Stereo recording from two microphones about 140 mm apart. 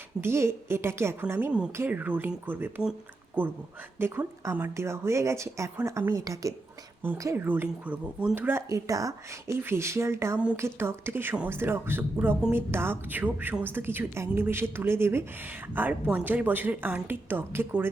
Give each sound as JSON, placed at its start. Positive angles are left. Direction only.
{"t": 0.2, "sound": "a woman's voice", "side_deg": -20}